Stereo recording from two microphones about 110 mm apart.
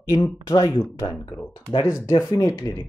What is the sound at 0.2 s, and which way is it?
Speech, 35° left (ahead or behind).